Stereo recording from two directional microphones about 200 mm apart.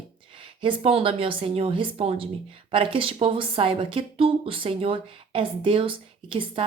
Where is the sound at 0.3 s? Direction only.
25° right (ahead or behind).